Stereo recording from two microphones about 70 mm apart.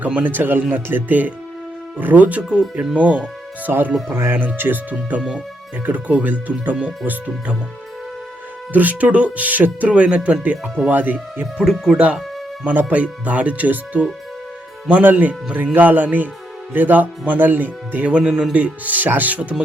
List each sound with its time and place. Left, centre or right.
0.0 s speech: right
2.5 s speech: centre
8.7 s speech: right
10.4 s speech: right
11.6 s speech: centre
11.9 s speech: centre